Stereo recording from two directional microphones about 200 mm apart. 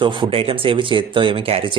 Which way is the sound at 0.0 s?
25° right (ahead or behind).